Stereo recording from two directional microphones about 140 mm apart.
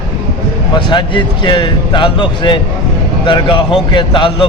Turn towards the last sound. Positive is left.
turn(degrees=35)  # may be behind; listen again after turning